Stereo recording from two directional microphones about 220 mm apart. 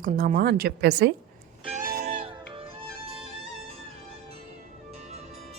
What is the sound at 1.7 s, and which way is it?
Music, 40° right (ahead or behind).